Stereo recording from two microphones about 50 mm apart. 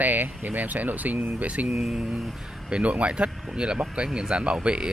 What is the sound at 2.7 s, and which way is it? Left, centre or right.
Speech, right.